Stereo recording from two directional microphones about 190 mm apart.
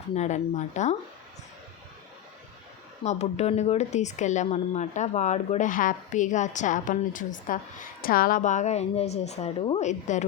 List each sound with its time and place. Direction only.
0.1 s speech: 40° left (ahead or behind)
3.0 s speech: 35° left (ahead or behind)